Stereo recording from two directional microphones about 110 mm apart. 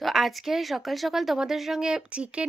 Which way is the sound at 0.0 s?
Centre (ahead or behind).